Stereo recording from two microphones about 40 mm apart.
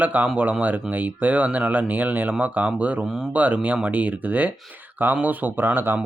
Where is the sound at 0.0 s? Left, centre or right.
Right.